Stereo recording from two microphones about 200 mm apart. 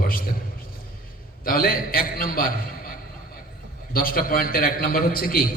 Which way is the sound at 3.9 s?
45° left (ahead or behind).